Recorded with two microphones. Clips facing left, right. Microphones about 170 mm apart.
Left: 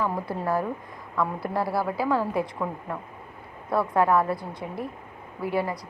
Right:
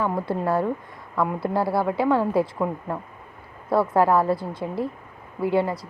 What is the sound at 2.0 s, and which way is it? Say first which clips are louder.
Speech: right 5 dB; 25° right (ahead or behind).